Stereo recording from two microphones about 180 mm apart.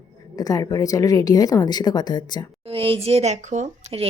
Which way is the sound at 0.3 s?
20° left (ahead or behind).